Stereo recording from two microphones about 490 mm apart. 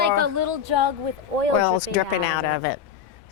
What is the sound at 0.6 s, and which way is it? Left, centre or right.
Speech, right.